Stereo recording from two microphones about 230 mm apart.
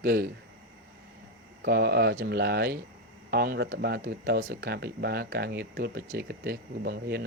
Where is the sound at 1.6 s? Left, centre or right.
Right.